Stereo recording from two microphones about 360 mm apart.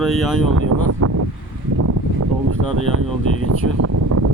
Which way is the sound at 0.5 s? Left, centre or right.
Right.